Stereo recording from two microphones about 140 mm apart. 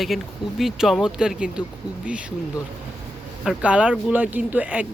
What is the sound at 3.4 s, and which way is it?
Speech, 5° right (ahead or behind).